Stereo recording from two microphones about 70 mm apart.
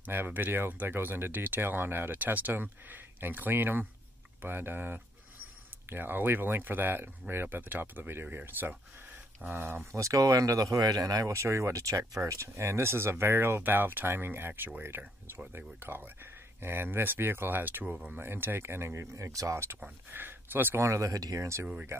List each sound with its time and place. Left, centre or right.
0.0 s speech: right
9.9 s speech: right
11.3 s speech: right
20.8 s speech: right